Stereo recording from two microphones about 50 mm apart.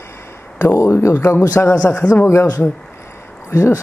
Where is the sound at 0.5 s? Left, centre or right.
Left.